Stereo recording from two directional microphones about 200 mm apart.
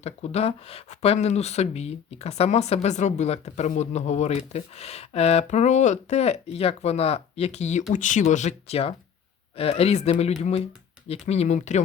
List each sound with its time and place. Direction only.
0.0 s speech: 30° left (ahead or behind)